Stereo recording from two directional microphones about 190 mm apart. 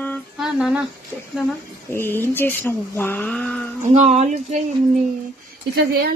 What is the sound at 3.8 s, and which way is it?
Speech, 40° right (ahead or behind).